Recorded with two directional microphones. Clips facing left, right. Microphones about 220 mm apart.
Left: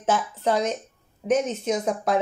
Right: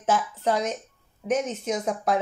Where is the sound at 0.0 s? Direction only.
25° left (ahead or behind).